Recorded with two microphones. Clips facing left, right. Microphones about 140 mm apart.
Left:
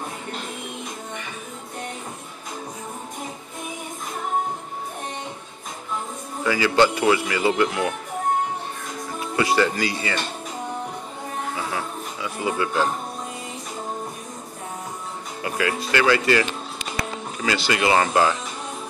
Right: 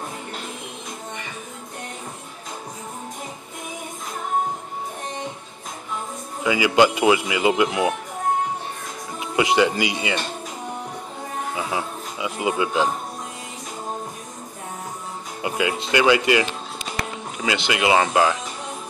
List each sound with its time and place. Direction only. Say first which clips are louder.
6.4 s speech: right 1 dB; 15° right (ahead or behind)
9.2 s speech: right 2 dB; 20° right (ahead or behind)
11.5 s music: right 2 dB; 15° right (ahead or behind)
15.4 s speech: right 1 dB; 20° right (ahead or behind)